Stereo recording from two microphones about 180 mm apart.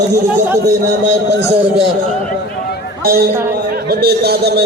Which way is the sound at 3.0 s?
55° right (ahead or behind).